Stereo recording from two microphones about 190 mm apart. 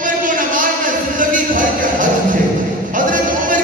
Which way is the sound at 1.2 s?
45° right (ahead or behind).